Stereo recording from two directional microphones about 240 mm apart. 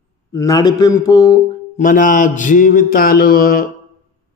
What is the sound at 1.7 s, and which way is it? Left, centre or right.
Mantra, left.